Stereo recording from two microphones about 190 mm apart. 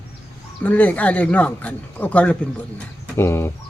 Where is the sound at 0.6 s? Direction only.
10° left (ahead or behind).